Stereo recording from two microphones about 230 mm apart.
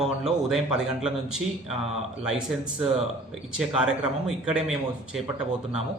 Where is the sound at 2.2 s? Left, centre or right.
Centre.